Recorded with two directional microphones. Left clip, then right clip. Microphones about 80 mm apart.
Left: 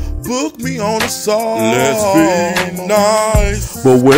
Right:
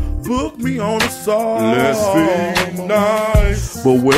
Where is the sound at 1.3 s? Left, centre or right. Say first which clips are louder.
Left 2 dB; left.